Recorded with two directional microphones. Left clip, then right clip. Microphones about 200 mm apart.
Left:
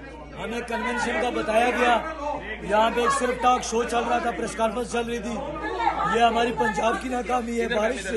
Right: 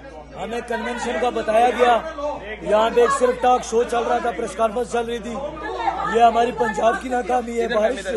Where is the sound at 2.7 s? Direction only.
20° right (ahead or behind).